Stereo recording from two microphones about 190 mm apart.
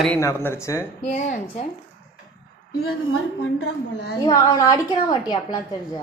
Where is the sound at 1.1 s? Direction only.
40° left (ahead or behind).